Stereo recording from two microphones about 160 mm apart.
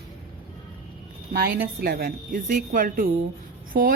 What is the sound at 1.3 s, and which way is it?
Speech, 70° right (ahead or behind).